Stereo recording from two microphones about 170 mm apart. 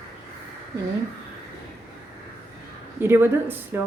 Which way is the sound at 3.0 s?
15° right (ahead or behind).